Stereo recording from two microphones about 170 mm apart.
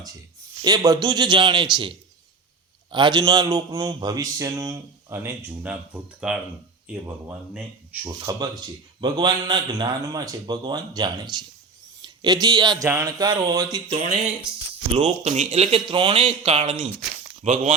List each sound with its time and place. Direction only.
0.6 s a man's voice: 25° right (ahead or behind)
2.9 s a man's voice: 25° right (ahead or behind)
5.6 s speech: 5° right (ahead or behind)
9.0 s a man's voice: 25° right (ahead or behind)
13.7 s speech: 35° right (ahead or behind)